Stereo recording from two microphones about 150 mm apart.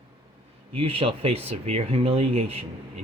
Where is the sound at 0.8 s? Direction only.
40° right (ahead or behind).